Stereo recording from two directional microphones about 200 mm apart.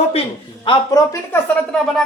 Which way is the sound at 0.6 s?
15° left (ahead or behind).